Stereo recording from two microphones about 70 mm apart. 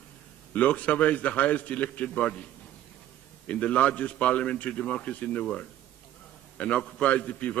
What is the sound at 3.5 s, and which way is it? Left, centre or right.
A man's voice, centre.